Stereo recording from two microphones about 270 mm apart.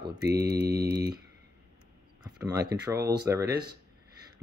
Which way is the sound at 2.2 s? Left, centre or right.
Centre.